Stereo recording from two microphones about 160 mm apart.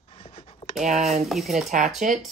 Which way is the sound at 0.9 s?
Centre (ahead or behind).